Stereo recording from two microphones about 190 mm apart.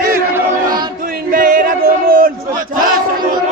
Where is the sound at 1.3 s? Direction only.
45° right (ahead or behind).